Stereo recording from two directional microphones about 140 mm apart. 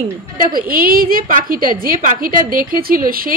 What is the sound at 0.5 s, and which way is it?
A woman's voice, 90° right.